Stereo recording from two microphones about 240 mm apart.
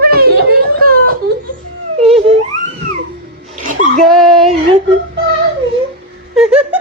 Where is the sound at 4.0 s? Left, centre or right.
Centre.